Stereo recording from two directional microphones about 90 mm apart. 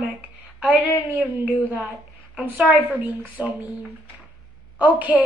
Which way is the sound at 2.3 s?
10° right (ahead or behind).